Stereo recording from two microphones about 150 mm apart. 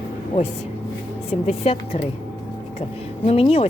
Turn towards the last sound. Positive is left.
turn(degrees=40)  # may be behind; listen again after turning